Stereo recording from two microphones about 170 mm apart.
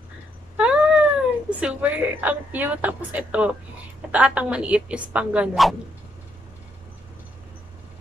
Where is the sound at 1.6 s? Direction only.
10° right (ahead or behind).